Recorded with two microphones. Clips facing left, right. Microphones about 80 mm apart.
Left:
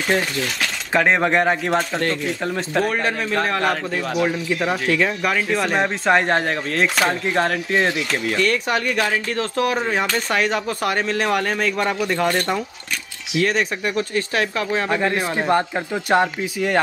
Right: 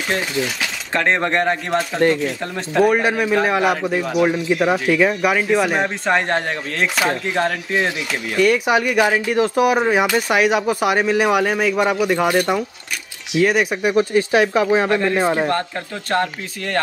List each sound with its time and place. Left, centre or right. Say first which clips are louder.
0.1 s a man's voice: even; centre
0.9 s a man's voice: left 1 dB; centre
2.8 s a man's voice: right 8 dB; centre
15.4 s speech: left 2 dB; centre